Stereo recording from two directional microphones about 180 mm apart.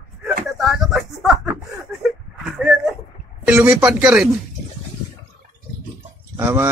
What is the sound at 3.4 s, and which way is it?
Speech, 10° right (ahead or behind).